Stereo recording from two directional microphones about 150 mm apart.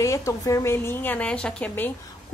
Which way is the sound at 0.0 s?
20° left (ahead or behind).